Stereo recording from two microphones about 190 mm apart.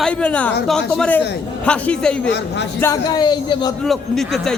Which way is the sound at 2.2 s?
65° left (ahead or behind).